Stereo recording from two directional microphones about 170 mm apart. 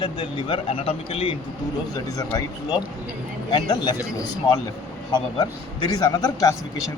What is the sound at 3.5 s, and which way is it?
Speech, 30° left (ahead or behind).